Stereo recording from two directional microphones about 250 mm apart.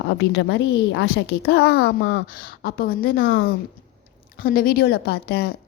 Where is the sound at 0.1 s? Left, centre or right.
Left.